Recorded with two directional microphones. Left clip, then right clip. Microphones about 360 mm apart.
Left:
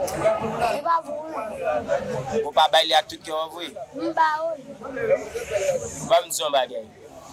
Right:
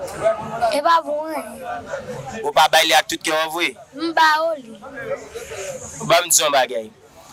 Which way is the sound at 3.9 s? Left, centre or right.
Right.